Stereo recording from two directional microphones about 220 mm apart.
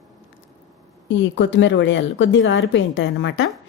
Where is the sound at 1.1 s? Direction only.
55° left (ahead or behind).